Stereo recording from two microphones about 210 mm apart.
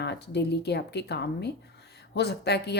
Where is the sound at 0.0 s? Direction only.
55° left (ahead or behind).